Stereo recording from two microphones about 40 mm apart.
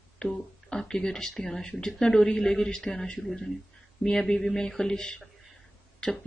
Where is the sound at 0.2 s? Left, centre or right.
Centre.